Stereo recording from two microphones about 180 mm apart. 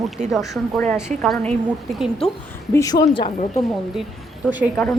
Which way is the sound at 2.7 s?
20° left (ahead or behind).